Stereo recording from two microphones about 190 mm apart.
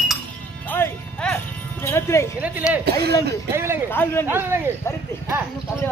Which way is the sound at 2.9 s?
55° right (ahead or behind).